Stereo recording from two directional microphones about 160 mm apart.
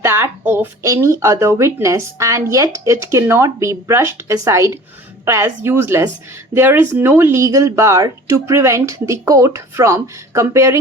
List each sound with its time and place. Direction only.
0.0 s speech: 15° right (ahead or behind)